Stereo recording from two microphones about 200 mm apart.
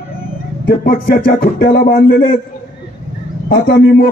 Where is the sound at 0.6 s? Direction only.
45° left (ahead or behind).